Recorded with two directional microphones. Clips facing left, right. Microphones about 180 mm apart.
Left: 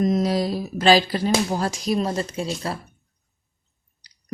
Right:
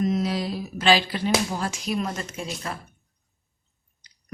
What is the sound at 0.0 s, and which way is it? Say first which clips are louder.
Speech: left 4 dB; 40° left (ahead or behind).